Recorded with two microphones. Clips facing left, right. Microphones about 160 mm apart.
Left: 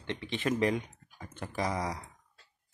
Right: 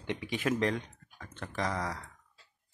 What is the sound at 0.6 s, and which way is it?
Speech, 10° left (ahead or behind).